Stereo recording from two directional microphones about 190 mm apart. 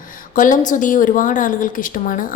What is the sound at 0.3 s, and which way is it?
A woman's voice, 45° left (ahead or behind).